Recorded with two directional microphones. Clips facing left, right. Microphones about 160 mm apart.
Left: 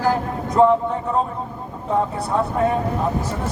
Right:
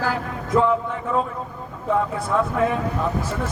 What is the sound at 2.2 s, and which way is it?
Speech, 35° left (ahead or behind).